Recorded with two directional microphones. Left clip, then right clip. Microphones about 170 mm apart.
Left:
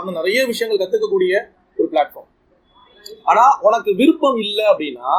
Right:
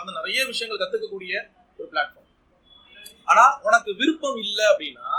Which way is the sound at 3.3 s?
20° left (ahead or behind).